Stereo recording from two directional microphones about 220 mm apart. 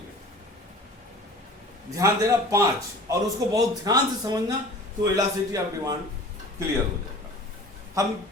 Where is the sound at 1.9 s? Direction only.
15° right (ahead or behind).